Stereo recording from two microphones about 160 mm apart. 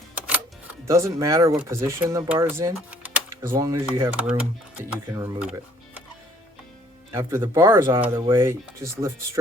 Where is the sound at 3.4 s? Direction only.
20° right (ahead or behind).